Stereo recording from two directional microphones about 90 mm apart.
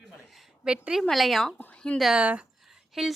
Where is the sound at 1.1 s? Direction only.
Centre (ahead or behind).